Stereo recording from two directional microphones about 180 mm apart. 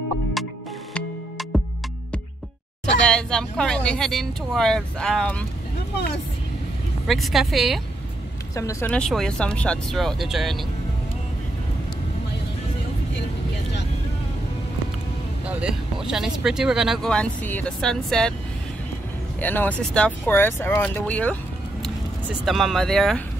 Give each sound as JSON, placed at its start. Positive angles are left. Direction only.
{"t": 0.9, "sound": "music", "side_deg": 0}
{"t": 3.1, "sound": "speech", "side_deg": 5}
{"t": 7.1, "sound": "speech", "side_deg": 0}
{"t": 8.5, "sound": "speech", "side_deg": 15}
{"t": 8.9, "sound": "speech", "side_deg": 5}
{"t": 16.1, "sound": "speech", "side_deg": -5}
{"t": 19.4, "sound": "speech", "side_deg": 10}
{"t": 22.4, "sound": "speech", "side_deg": 0}